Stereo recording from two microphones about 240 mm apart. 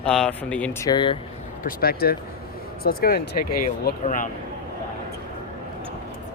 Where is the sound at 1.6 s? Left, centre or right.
Left.